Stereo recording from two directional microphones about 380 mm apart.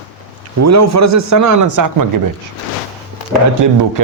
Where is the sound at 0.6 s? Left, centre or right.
Right.